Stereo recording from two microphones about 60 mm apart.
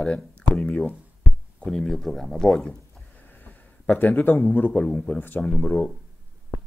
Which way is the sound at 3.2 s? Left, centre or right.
Left.